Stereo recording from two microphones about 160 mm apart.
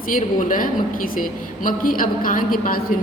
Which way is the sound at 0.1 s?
55° left (ahead or behind).